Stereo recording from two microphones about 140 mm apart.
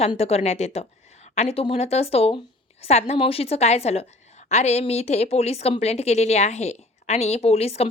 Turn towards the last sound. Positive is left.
turn(degrees=45)  # may be behind; listen again after turning